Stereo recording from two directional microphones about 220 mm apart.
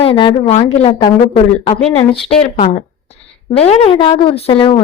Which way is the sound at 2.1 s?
25° left (ahead or behind).